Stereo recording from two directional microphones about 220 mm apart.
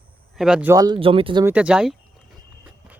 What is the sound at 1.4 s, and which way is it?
Speech, 5° right (ahead or behind).